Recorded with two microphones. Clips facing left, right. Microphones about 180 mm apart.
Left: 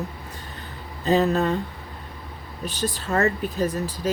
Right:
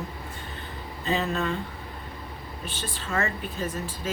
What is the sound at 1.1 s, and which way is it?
Speech, 40° left (ahead or behind).